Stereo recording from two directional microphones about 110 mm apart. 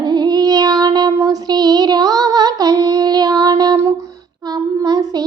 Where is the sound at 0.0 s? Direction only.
40° right (ahead or behind).